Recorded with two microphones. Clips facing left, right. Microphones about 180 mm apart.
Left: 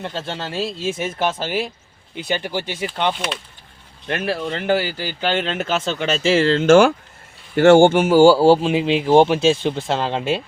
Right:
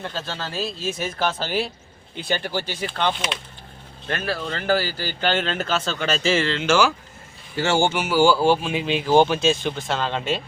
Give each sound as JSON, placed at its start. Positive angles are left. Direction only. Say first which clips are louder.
{"t": 0.0, "sound": "speech", "louder": "left 3 dB", "side_deg": 25}
{"t": 8.0, "sound": "speech", "louder": "left 6 dB", "side_deg": 40}